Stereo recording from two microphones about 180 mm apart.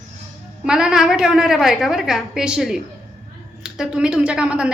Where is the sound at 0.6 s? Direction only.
5° right (ahead or behind).